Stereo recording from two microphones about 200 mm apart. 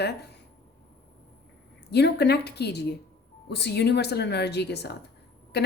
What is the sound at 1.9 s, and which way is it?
A woman's voice, 55° left (ahead or behind).